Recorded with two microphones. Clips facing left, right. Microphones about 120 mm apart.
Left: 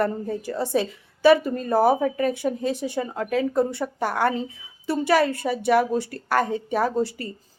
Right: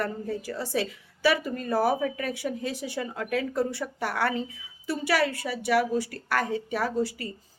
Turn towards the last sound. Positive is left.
turn(degrees=25)  # may be behind; listen again after turning